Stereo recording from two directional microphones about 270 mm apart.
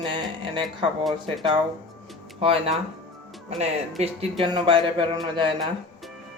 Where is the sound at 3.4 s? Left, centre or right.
Right.